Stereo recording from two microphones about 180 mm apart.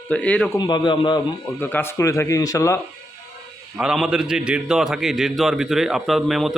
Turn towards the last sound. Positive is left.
turn(degrees=0)  # may be behind; listen again after turning